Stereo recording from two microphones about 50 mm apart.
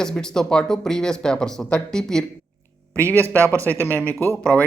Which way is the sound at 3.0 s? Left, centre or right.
Right.